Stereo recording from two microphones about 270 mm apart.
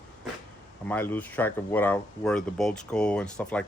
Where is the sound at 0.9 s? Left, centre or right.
Centre.